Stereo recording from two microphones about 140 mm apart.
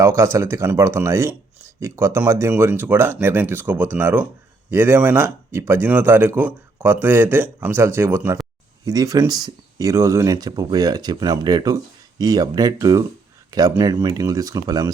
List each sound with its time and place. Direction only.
0.0 s speech: 20° right (ahead or behind)